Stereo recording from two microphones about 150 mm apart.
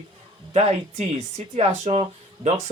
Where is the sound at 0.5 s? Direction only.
45° right (ahead or behind).